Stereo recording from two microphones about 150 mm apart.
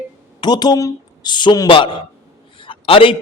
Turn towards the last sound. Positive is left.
turn(degrees=35)  # may be behind; listen again after turning